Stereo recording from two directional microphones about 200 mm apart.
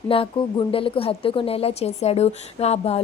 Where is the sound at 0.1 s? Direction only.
25° left (ahead or behind).